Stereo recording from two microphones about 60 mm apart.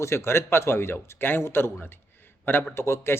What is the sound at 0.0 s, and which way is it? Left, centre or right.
A man's voice, left.